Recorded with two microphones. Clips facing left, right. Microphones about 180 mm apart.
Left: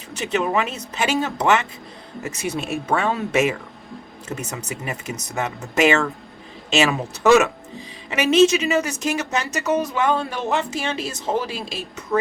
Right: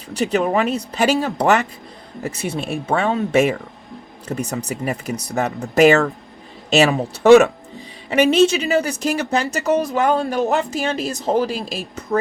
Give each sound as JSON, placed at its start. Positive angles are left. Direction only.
{"t": 0.2, "sound": "speech", "side_deg": -35}